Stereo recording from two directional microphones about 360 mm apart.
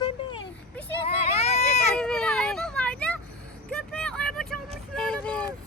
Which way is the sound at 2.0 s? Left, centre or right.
Centre.